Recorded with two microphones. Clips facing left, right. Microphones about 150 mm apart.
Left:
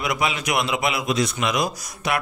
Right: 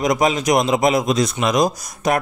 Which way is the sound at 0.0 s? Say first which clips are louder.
Right 7 dB; 40° right (ahead or behind).